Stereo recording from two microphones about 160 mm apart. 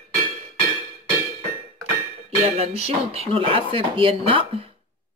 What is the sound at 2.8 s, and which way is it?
Speech, 40° right (ahead or behind).